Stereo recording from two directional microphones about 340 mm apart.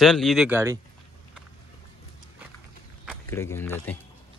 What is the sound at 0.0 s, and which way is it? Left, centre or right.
Speech, centre.